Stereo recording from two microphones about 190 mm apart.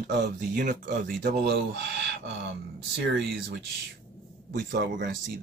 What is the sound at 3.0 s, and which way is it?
Speech, 60° right (ahead or behind).